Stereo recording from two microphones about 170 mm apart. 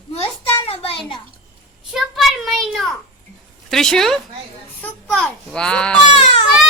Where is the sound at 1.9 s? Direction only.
Centre (ahead or behind).